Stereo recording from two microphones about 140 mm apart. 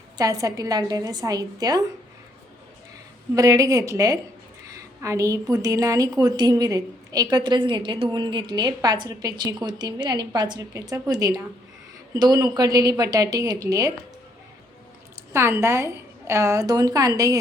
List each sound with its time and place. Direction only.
0.2 s a woman's voice: 25° right (ahead or behind)
3.3 s a woman's voice: 25° right (ahead or behind)
15.3 s a woman's voice: 20° right (ahead or behind)